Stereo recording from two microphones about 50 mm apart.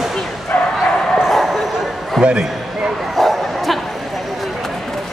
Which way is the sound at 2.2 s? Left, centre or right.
Centre.